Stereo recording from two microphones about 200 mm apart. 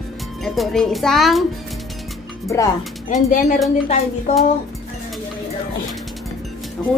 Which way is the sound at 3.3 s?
40° left (ahead or behind).